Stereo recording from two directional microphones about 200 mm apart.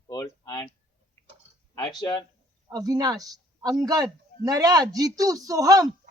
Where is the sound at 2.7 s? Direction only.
15° right (ahead or behind).